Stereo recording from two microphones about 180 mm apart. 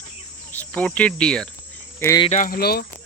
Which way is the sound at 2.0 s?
20° left (ahead or behind).